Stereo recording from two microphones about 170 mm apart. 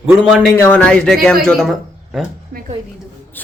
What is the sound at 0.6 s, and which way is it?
A woman's voice, 5° left (ahead or behind).